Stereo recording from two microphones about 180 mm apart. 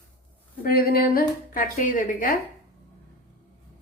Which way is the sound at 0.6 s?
55° left (ahead or behind).